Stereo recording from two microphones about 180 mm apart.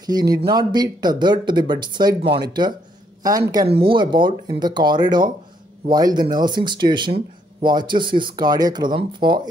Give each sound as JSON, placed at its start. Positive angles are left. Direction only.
{"t": 0.0, "sound": "speech", "side_deg": -20}